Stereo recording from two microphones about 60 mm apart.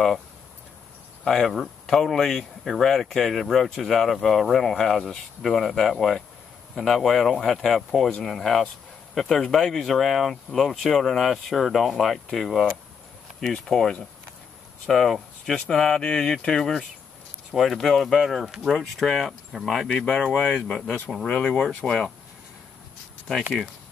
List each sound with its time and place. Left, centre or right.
1.2 s speech: centre
20.2 s speech: centre
20.7 s speech: left
21.1 s speech: centre